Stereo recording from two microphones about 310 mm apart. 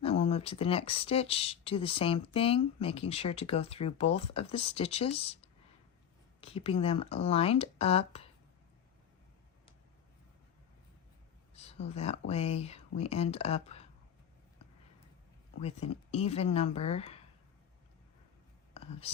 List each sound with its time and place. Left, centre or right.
0.0 s speech: centre
6.4 s speech: centre
11.5 s speech: centre
15.6 s speech: centre
18.7 s whispering: centre